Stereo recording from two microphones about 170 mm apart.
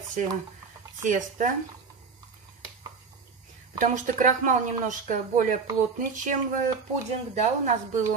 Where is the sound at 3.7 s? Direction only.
50° right (ahead or behind).